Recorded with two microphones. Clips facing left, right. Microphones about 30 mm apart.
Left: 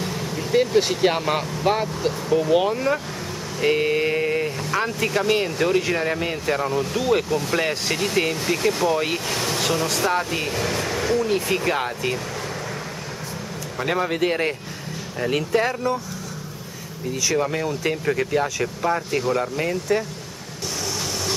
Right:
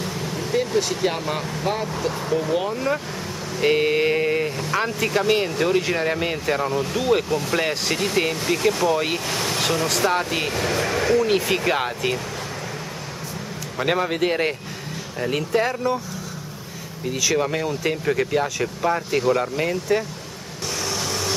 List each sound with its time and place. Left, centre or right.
0.0 s vehicle: centre
0.5 s speech: left
2.7 s speech: centre
3.5 s speech: centre
13.7 s speech: centre
17.2 s speech: centre